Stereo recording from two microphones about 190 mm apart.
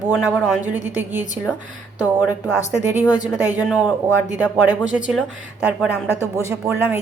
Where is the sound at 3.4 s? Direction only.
10° right (ahead or behind).